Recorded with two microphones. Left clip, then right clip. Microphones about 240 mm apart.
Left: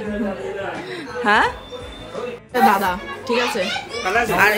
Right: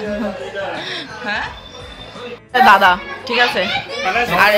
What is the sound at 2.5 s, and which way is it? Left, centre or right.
Speech, centre.